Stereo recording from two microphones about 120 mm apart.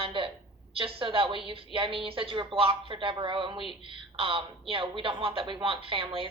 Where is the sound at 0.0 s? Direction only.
45° right (ahead or behind).